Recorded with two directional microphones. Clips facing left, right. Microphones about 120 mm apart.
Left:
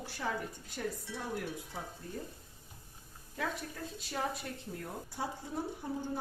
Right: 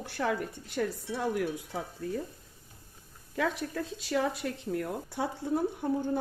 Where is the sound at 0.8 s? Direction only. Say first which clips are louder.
Right 8 dB; 90° right.